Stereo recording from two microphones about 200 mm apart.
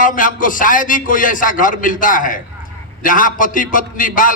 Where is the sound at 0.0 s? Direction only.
40° left (ahead or behind).